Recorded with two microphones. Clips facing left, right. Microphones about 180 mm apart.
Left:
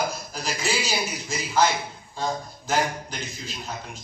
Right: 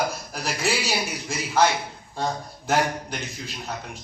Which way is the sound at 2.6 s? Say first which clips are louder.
Right 2 dB; 60° right (ahead or behind).